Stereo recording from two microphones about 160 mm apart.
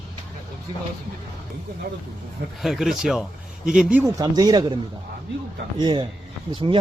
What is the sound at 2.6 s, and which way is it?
Speech, centre (ahead or behind).